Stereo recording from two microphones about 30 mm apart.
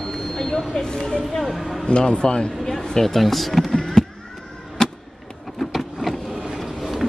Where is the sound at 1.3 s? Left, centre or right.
Centre.